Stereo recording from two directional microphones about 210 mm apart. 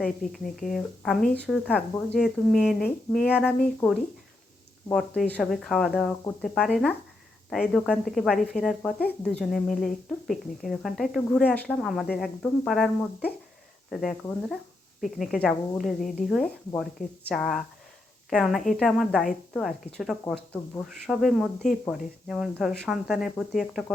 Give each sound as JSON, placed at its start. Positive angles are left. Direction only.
{"t": 0.0, "sound": "a woman's voice", "side_deg": 0}